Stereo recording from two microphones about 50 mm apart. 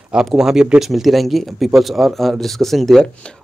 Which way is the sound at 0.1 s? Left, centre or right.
Centre.